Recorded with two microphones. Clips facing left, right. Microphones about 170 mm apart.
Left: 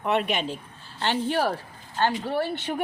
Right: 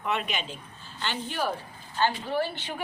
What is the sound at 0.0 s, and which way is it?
Speech, 55° left (ahead or behind).